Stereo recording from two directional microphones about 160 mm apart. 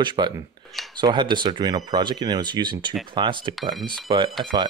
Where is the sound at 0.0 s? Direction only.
30° right (ahead or behind).